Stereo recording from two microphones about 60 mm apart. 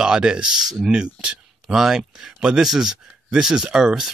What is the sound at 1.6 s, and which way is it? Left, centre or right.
Speech, centre.